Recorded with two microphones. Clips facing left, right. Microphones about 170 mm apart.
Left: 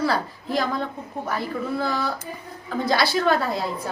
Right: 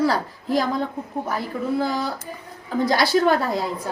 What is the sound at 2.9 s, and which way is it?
Speech, 15° right (ahead or behind).